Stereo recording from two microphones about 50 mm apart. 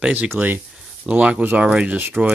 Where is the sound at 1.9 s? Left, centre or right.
Right.